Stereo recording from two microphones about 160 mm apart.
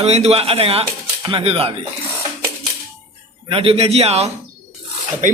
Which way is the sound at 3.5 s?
35° right (ahead or behind).